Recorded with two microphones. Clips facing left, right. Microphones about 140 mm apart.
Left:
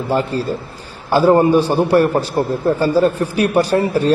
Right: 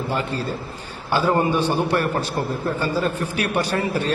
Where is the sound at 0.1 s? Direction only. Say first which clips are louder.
Left 10 dB; 40° left (ahead or behind).